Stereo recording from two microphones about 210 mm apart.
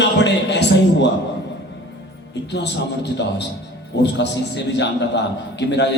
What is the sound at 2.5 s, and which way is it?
A man's voice, 55° left (ahead or behind).